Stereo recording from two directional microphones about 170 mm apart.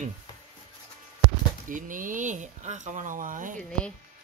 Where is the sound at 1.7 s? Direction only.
50° right (ahead or behind).